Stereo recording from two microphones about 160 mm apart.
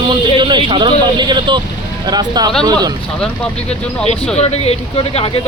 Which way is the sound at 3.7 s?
40° left (ahead or behind).